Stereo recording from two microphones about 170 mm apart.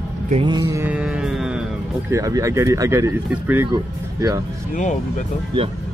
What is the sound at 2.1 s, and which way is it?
Speech, 20° right (ahead or behind).